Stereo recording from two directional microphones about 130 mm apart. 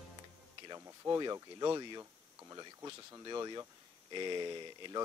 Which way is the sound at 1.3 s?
30° right (ahead or behind).